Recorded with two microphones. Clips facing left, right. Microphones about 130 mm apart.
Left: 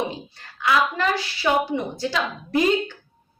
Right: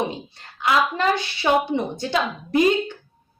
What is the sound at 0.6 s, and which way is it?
Speech, 20° right (ahead or behind).